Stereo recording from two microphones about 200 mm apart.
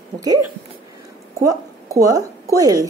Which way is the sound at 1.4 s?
15° right (ahead or behind).